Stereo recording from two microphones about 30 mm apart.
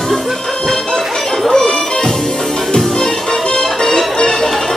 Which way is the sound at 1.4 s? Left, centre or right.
Left.